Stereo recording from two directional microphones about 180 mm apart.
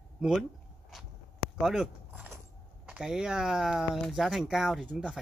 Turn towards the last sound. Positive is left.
turn(degrees=0)  # may be behind; listen again after turning